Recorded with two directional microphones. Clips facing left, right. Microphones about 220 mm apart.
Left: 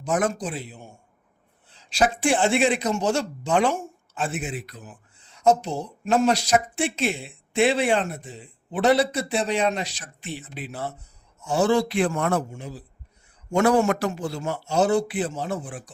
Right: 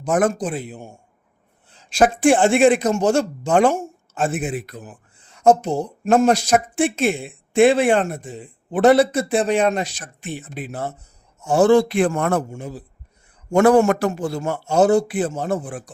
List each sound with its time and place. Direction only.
0.0 s a man's voice: 50° right (ahead or behind)